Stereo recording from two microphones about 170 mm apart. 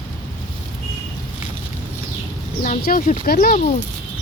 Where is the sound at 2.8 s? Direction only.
60° left (ahead or behind).